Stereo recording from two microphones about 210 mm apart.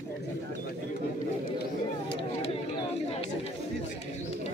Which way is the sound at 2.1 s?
25° left (ahead or behind).